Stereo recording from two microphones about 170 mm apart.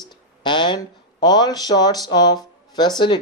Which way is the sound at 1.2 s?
25° left (ahead or behind).